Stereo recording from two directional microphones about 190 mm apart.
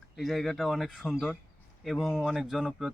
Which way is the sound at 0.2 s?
Centre (ahead or behind).